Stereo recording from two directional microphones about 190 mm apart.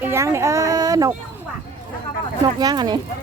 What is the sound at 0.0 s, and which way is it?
Speech, 15° right (ahead or behind).